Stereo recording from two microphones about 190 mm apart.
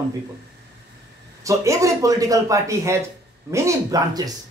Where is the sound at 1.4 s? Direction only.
15° right (ahead or behind).